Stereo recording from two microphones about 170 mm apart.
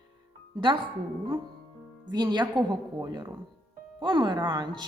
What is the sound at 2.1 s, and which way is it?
A woman's voice, 25° right (ahead or behind).